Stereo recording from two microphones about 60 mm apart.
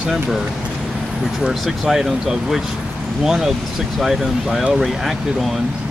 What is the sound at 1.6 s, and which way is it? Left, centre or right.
Speech, centre.